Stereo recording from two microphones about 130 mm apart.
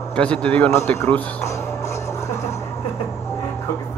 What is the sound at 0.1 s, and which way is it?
Speech, 10° left (ahead or behind).